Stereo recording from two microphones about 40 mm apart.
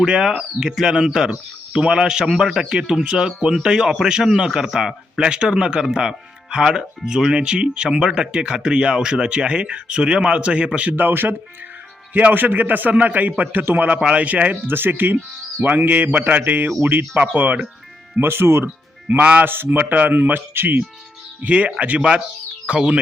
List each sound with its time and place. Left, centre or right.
0.0 s speech: centre
10.9 s speech: right
14.7 s speech: right
18.2 s speech: right
18.6 s music: right
19.2 s speech: right
19.5 s speech: right
21.4 s speech: right